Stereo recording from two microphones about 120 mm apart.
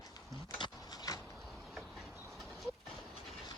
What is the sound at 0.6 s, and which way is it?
Dog, 30° left (ahead or behind).